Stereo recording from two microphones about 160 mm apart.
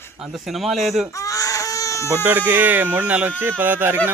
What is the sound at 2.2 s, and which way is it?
Speech, 10° right (ahead or behind).